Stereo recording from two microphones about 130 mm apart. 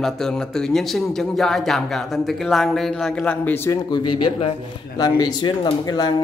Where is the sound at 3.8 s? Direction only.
35° left (ahead or behind).